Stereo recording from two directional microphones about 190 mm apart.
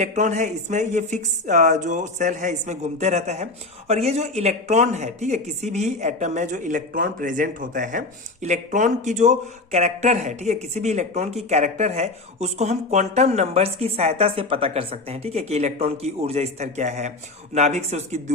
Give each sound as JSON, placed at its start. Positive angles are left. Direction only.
{"t": 0.0, "sound": "speech", "side_deg": -40}